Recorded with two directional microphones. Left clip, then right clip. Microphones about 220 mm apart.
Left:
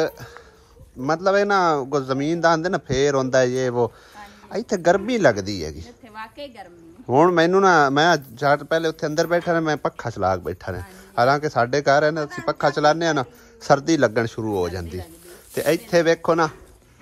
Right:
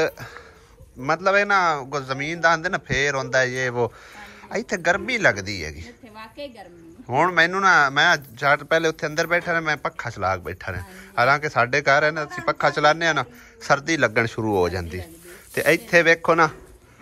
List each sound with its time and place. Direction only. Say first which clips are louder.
1.0 s speech: even; 25° left (ahead or behind)
6.1 s a woman's voice: left 2 dB; 5° left (ahead or behind)
7.1 s speech: left 2 dB; 30° left (ahead or behind)